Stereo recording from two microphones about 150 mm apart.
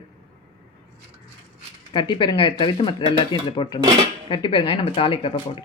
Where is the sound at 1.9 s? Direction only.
30° left (ahead or behind).